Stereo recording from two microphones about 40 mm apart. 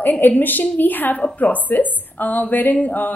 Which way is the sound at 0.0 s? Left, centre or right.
Left.